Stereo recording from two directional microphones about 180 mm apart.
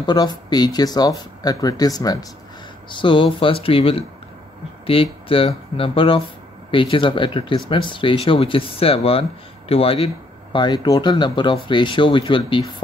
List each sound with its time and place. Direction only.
0.0 s speech: 25° left (ahead or behind)